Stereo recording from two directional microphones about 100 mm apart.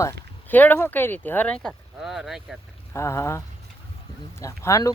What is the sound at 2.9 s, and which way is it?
Speech, 25° left (ahead or behind).